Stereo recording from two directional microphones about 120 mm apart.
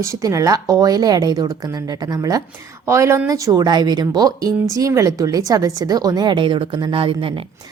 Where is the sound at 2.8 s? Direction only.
25° right (ahead or behind); by 7.3 s 50° right (ahead or behind).